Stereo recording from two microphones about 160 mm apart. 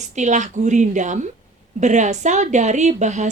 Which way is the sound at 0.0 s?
50° right (ahead or behind).